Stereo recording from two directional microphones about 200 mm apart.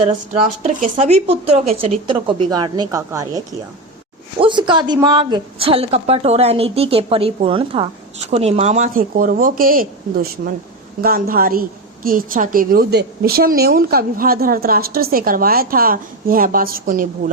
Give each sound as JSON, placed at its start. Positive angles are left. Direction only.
{"t": 0.6, "sound": "a woman's voice", "side_deg": -35}